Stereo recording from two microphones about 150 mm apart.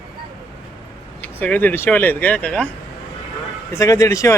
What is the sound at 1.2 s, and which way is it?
Speech, 10° left (ahead or behind).